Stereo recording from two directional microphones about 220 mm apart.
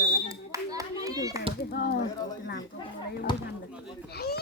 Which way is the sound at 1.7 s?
50° left (ahead or behind).